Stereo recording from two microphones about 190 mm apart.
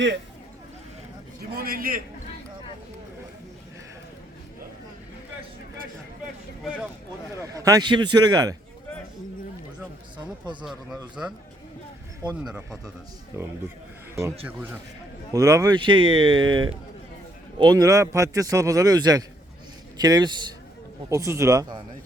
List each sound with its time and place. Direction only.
1.5 s a man's voice: 50° right (ahead or behind)
7.4 s speech: 15° right (ahead or behind)
11.2 s speech: 5° right (ahead or behind)
12.4 s speech: centre (ahead or behind)
13.3 s speech: 15° right (ahead or behind)